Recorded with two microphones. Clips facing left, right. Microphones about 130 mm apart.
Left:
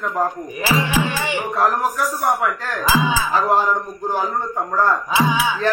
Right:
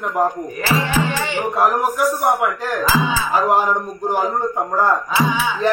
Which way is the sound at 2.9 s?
15° left (ahead or behind).